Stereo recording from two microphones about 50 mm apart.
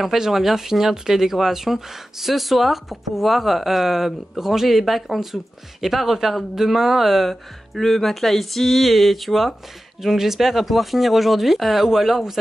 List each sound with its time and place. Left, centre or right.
0.0 s speech: centre